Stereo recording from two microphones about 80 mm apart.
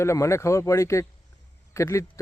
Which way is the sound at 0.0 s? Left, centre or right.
Left.